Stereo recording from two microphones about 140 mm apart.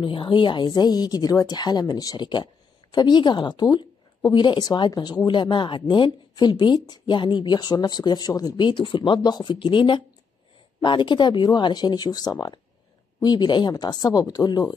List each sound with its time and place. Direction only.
0.0 s a woman's voice: 35° left (ahead or behind)